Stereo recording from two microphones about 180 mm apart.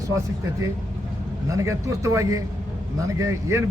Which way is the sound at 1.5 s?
15° right (ahead or behind).